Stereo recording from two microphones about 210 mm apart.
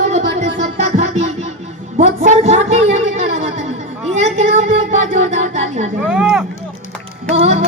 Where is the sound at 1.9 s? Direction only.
35° right (ahead or behind).